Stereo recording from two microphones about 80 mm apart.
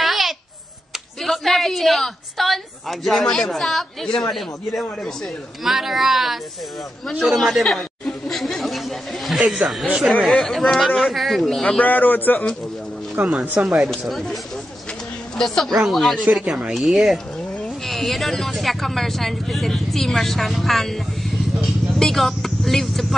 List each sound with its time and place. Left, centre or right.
0.0 s babbling: centre
1.2 s a woman's voice: centre
8.3 s chatter: centre
10.2 s speech: centre
11.8 s a man's voice: left
13.2 s speech: centre
13.8 s speech: centre